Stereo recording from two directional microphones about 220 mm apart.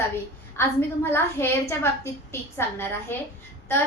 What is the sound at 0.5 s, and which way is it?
A woman's voice, 10° left (ahead or behind).